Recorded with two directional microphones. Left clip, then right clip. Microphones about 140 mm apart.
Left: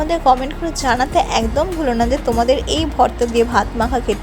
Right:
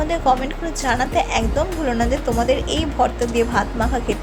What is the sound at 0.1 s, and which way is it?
Speech, 35° left (ahead or behind).